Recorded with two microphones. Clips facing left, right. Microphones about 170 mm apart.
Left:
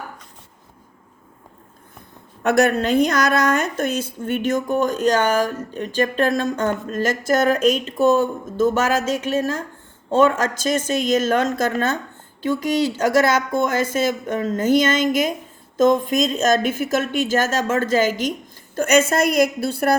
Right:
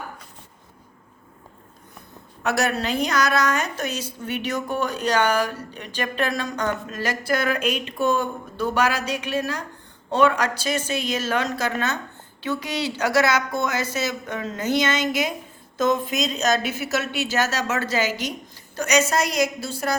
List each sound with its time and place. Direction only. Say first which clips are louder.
2.4 s a woman's voice: left 6 dB; 55° left (ahead or behind)